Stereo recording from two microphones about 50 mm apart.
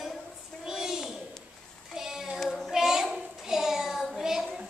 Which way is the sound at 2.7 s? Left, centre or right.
Centre.